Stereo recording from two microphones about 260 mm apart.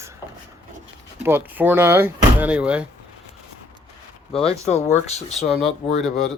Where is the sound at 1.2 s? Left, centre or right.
Centre.